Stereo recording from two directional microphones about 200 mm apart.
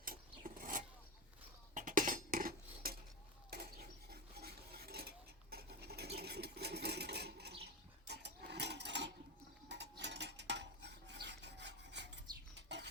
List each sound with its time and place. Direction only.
0.0 s filing: 45° right (ahead or behind)
1.7 s cutlery: 40° right (ahead or behind)
7.6 s a sound: 55° right (ahead or behind)
10.0 s filing: 60° right (ahead or behind)